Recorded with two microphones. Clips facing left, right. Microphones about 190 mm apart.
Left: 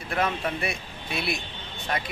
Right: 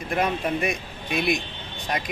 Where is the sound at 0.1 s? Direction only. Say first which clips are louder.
Right 3 dB; 15° right (ahead or behind).